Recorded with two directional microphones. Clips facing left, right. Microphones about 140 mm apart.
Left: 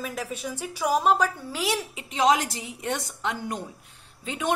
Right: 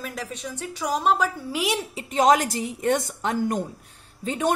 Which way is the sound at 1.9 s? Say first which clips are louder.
Right 4 dB; 45° right (ahead or behind).